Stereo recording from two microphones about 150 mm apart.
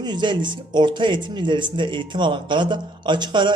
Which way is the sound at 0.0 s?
30° right (ahead or behind).